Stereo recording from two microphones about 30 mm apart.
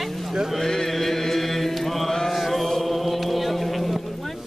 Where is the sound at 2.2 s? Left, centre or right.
Centre.